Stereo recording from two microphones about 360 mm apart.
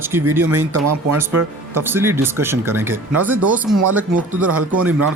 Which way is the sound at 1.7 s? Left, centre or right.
Centre.